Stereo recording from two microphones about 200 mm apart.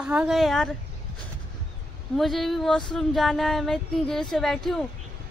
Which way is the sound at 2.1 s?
Centre (ahead or behind).